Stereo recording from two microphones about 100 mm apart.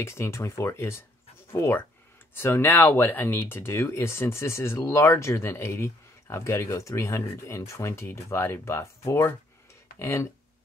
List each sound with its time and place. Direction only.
0.0 s speech: 30° left (ahead or behind)